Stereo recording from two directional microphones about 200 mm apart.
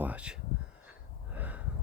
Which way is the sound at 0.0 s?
5° right (ahead or behind).